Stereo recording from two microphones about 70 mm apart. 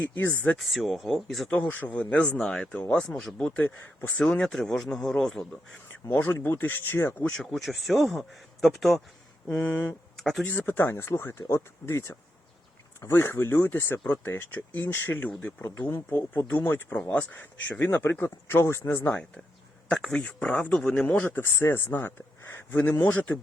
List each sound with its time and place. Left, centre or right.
0.2 s speech: left
0.6 s speech: centre
1.5 s speech: centre
4.2 s speech: centre
6.3 s speech: left
7.3 s speech: centre
9.6 s speech: left
10.2 s speech: centre
10.4 s speech: left
19.9 s speech: centre
20.2 s speech: centre
21.1 s speech: left